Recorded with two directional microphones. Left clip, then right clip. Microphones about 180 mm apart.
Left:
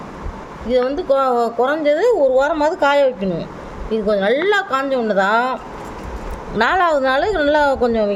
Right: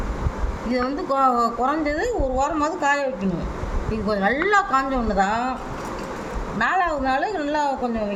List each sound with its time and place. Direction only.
0.7 s speech: 40° left (ahead or behind)
6.6 s a woman's voice: 55° left (ahead or behind)